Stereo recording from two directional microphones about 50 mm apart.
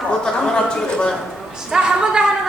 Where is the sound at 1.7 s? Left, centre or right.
Centre.